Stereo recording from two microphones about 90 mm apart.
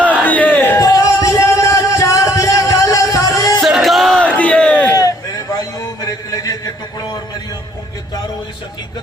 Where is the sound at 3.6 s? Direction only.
Centre (ahead or behind).